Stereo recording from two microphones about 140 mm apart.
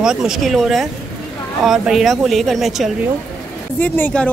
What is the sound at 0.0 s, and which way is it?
A woman's voice, 5° right (ahead or behind).